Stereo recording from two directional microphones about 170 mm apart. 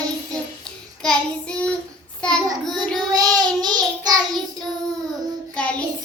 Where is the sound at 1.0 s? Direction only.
5° left (ahead or behind).